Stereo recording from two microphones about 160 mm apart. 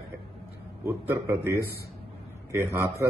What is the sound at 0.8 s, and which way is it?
A man's voice, 20° right (ahead or behind).